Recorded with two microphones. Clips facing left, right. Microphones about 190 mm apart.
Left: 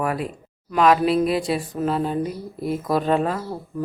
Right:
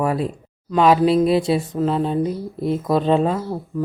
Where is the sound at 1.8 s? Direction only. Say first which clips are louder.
Right 3 dB; 5° left (ahead or behind).